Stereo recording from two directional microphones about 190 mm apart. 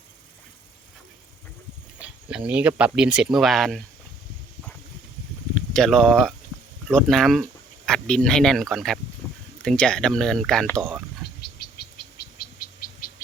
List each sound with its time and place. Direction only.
2.0 s speech: 5° right (ahead or behind)
5.5 s speech: 5° left (ahead or behind)
11.4 s bird: 60° left (ahead or behind)